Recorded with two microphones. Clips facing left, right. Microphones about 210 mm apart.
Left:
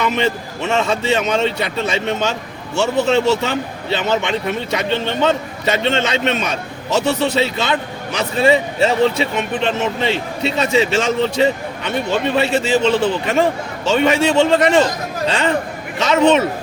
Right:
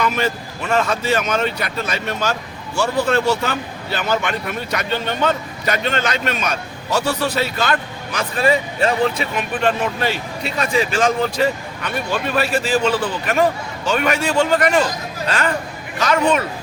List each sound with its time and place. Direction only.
0.0 s speech: 20° left (ahead or behind)